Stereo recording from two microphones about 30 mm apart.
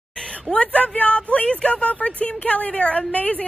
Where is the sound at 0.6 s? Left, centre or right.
Left.